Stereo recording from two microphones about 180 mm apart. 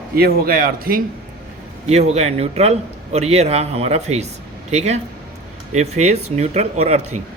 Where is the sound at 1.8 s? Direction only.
35° right (ahead or behind).